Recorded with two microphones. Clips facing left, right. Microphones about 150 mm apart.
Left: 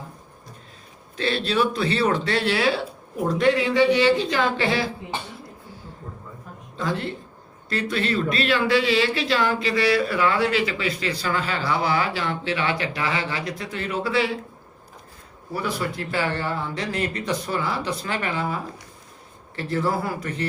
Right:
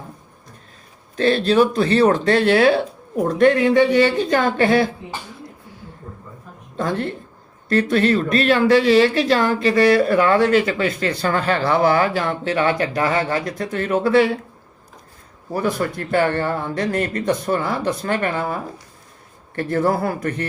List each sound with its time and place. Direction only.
1.1 s speech: 45° right (ahead or behind)
6.7 s speech: 50° right (ahead or behind)
15.5 s speech: 45° right (ahead or behind)